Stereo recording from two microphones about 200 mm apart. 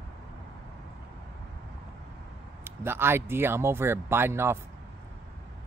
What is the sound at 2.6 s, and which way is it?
Speech, 10° right (ahead or behind).